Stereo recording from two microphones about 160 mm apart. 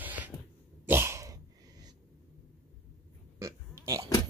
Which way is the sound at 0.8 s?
15° right (ahead or behind).